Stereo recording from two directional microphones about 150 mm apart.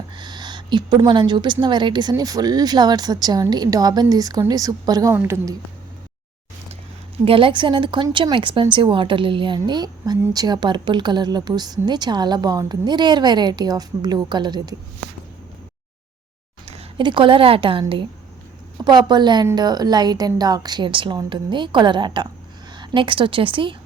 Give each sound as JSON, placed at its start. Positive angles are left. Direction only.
{"t": 0.2, "sound": "a woman's voice", "side_deg": -30}
{"t": 7.3, "sound": "a woman's voice", "side_deg": -35}
{"t": 16.6, "sound": "a woman's voice", "side_deg": -40}